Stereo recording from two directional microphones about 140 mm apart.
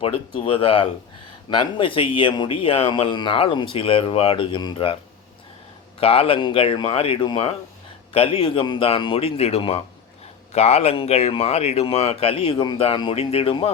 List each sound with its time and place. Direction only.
0.3 s speech: 40° left (ahead or behind)
6.0 s speech: 45° left (ahead or behind)